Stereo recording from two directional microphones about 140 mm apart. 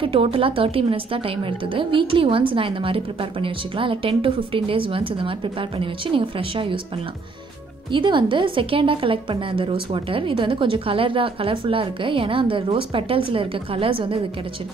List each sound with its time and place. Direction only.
0.0 s a woman's voice: 40° right (ahead or behind)
7.9 s a woman's voice: 35° right (ahead or behind)